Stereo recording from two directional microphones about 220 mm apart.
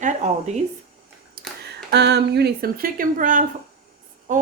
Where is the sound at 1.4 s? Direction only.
45° right (ahead or behind).